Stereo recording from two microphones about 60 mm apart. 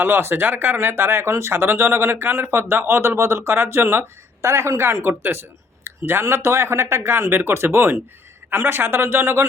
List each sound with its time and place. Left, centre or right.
0.0 s speech: right
3.5 s speech: right